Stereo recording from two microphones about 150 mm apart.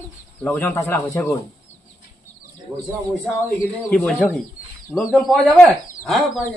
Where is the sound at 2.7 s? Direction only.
10° right (ahead or behind).